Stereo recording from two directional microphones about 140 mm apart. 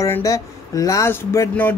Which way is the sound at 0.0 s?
25° left (ahead or behind).